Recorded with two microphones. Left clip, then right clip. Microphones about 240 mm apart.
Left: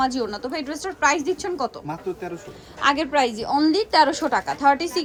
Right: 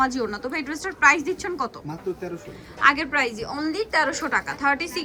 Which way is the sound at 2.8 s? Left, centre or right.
Centre.